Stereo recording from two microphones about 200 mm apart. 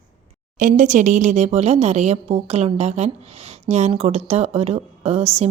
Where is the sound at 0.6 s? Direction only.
40° right (ahead or behind).